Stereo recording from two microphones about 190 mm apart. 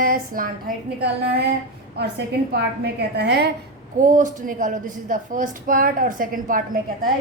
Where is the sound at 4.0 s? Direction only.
40° right (ahead or behind).